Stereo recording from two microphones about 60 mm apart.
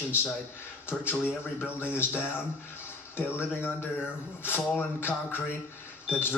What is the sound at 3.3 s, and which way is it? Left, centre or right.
A man's voice, left.